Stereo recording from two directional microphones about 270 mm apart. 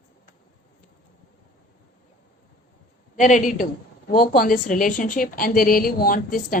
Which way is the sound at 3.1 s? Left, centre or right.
Left.